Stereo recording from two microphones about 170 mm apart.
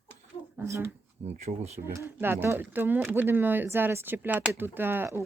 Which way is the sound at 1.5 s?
40° right (ahead or behind).